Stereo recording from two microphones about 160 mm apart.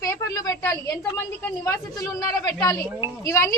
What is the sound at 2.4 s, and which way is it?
A child's voice, 20° left (ahead or behind).